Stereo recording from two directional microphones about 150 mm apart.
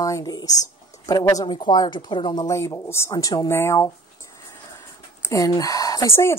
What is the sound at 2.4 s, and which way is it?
Speech, 20° left (ahead or behind).